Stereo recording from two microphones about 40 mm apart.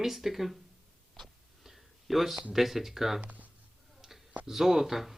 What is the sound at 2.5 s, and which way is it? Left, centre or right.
Speech, centre.